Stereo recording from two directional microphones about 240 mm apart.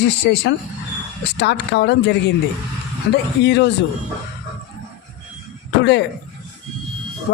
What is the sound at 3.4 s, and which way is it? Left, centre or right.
Speech, left.